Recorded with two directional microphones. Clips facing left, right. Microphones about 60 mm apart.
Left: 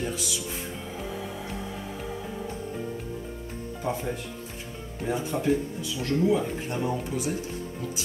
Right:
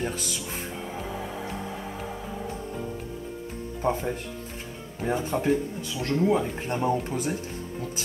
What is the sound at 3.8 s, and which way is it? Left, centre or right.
Speech, right.